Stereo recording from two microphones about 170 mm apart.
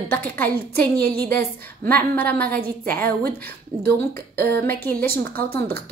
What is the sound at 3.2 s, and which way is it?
A woman's voice, 15° left (ahead or behind).